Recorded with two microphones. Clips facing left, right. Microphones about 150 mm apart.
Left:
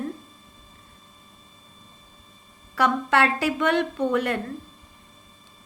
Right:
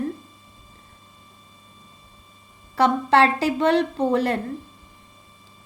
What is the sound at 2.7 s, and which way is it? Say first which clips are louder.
A woman's voice: right 4 dB; 30° right (ahead or behind).